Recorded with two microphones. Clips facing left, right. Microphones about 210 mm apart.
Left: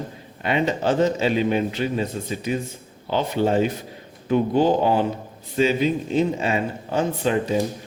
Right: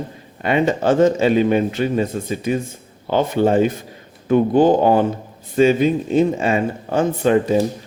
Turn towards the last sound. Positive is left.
turn(degrees=-50)  # may be behind; listen again after turning